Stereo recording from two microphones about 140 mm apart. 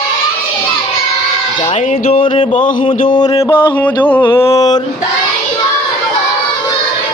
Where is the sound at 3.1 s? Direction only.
35° left (ahead or behind).